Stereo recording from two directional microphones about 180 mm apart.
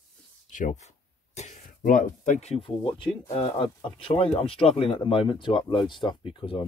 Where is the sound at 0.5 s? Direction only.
45° left (ahead or behind).